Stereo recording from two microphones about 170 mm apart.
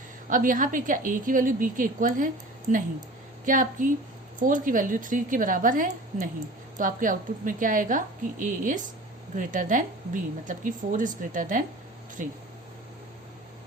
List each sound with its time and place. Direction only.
0.3 s a woman's voice: 50° right (ahead or behind)